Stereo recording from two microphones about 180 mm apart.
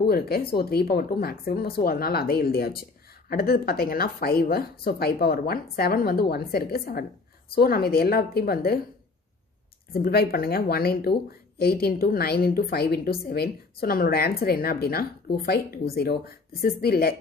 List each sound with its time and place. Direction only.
0.0 s speech: 60° left (ahead or behind)
9.9 s speech: 55° left (ahead or behind)